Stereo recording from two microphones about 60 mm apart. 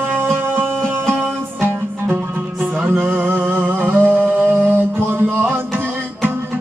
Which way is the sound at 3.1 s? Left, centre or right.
Right.